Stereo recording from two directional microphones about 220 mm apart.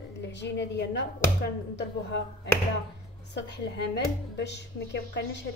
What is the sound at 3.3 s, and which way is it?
Speech, 50° left (ahead or behind).